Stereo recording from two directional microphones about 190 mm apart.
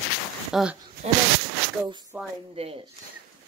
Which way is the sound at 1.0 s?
35° right (ahead or behind).